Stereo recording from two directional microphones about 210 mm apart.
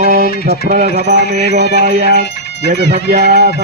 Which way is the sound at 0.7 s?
40° right (ahead or behind).